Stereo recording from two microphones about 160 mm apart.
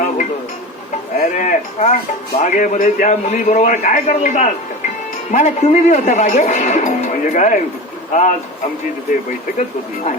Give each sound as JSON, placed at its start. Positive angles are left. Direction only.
{"t": 1.2, "sound": "a man's voice", "side_deg": 55}
{"t": 9.6, "sound": "a man's voice", "side_deg": 50}